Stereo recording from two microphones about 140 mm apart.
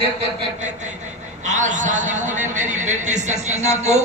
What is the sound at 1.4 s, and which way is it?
A man's voice, 60° right (ahead or behind).